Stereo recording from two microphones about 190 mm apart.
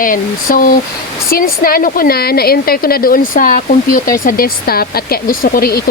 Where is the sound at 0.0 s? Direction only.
45° left (ahead or behind).